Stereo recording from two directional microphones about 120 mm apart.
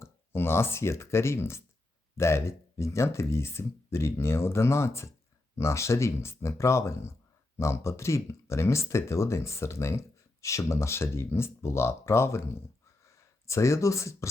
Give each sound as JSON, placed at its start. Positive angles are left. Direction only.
{"t": 0.0, "sound": "speech", "side_deg": 20}